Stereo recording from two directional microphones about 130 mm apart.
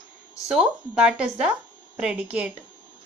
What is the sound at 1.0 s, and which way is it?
Speech, 5° right (ahead or behind).